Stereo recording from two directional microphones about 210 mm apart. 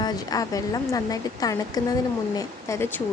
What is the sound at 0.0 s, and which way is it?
Speech, 15° left (ahead or behind).